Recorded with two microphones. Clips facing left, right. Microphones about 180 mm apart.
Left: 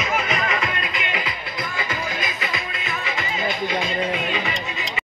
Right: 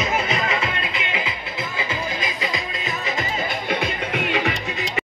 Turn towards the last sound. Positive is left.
turn(degrees=-60)  # may be behind; listen again after turning